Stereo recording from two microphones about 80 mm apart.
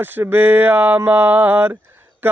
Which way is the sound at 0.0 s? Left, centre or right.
Right.